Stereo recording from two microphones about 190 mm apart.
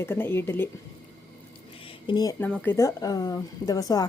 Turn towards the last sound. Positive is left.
turn(degrees=20)  # may be behind; listen again after turning